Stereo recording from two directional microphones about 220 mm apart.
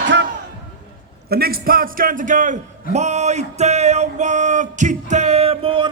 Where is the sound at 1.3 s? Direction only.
45° right (ahead or behind).